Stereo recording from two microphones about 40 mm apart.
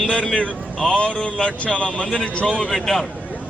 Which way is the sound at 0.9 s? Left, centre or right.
Left.